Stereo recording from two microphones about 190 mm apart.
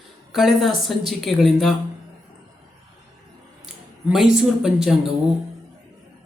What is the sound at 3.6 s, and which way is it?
Speech, centre (ahead or behind).